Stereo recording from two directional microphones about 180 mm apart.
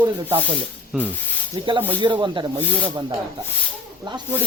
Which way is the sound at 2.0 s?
25° right (ahead or behind).